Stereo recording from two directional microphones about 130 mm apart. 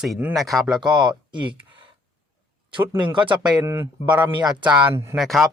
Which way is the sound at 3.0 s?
40° right (ahead or behind).